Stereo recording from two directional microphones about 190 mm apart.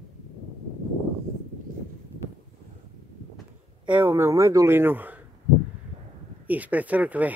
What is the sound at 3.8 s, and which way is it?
A man's voice, 10° right (ahead or behind).